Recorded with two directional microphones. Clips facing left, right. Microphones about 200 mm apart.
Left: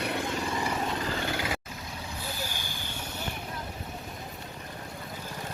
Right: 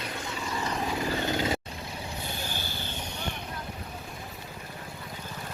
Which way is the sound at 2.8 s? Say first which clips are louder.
Right 1 dB; 10° left (ahead or behind).